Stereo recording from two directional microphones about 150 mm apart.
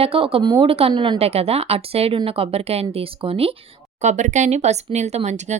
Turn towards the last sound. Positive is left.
turn(degrees=-50)  # may be behind; listen again after turning